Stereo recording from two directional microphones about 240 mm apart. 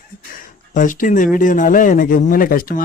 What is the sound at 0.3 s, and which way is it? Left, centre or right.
Speech, left.